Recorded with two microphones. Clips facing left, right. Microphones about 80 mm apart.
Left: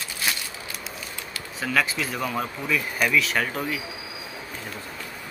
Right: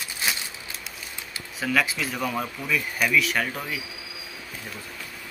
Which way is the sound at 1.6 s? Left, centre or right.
Centre.